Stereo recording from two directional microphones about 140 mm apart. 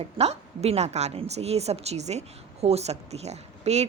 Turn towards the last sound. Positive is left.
turn(degrees=-50)  # may be behind; listen again after turning